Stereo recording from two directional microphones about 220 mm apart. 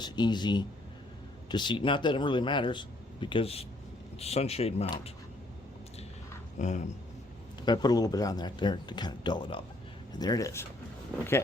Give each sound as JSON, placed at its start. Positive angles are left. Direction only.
{"t": 0.0, "sound": "speech", "side_deg": 20}
{"t": 6.6, "sound": "speech", "side_deg": 35}
{"t": 7.6, "sound": "speech", "side_deg": 20}
{"t": 11.1, "sound": "speech", "side_deg": -5}